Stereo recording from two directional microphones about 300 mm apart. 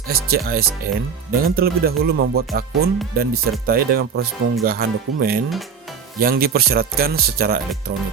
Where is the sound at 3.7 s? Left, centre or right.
Right.